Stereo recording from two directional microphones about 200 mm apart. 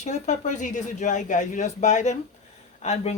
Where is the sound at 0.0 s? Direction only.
35° left (ahead or behind).